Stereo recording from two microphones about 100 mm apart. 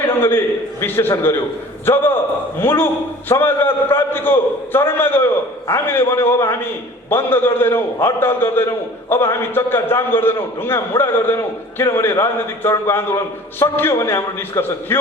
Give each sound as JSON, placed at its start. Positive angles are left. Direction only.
{"t": 0.2, "sound": "a man's voice", "side_deg": 25}